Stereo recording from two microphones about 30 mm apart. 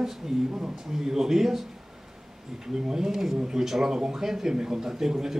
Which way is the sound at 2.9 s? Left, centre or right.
Centre.